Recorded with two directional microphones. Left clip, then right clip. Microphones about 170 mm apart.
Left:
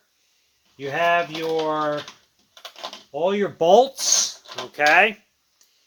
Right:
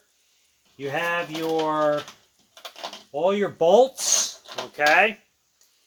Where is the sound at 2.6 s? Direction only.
5° left (ahead or behind).